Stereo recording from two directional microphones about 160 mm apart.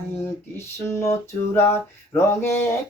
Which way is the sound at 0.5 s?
15° left (ahead or behind).